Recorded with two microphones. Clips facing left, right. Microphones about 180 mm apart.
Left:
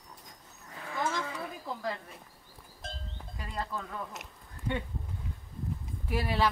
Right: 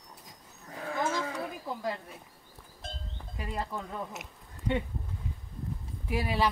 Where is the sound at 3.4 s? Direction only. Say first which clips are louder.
Right 2 dB; 15° right (ahead or behind).